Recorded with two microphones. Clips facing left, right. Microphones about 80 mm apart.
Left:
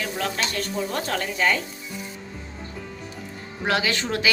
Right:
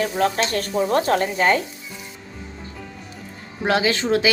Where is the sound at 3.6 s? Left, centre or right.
Right.